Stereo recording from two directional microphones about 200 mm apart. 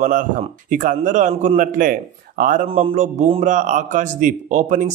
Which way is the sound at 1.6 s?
45° right (ahead or behind).